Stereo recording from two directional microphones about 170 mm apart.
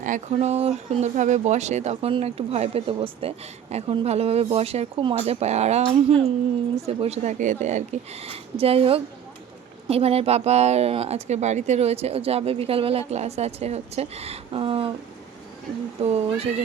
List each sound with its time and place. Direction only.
0.0 s speech: 50° right (ahead or behind)
0.3 s speech: 40° right (ahead or behind)
16.0 s speech: 40° right (ahead or behind)